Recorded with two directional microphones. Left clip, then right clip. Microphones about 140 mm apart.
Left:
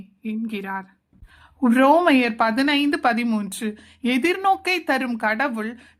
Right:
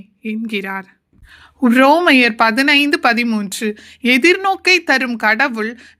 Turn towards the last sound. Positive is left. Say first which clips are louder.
# right 7 dB
turn(degrees=-15)  # may be behind; listen again after turning